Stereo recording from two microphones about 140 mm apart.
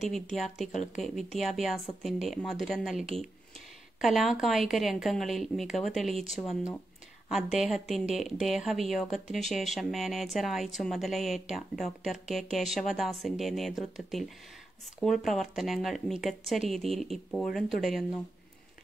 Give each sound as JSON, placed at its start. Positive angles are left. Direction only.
{"t": 0.1, "sound": "a woman's voice", "side_deg": 0}
{"t": 0.7, "sound": "speech", "side_deg": 55}
{"t": 1.4, "sound": "a woman's voice", "side_deg": 0}